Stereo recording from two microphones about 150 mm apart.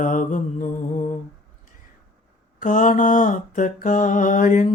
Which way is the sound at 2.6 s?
60° left (ahead or behind).